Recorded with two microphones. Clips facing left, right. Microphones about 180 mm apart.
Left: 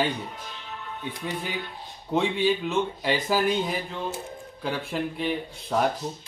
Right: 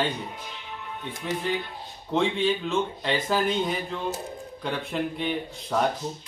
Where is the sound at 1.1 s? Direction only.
45° right (ahead or behind).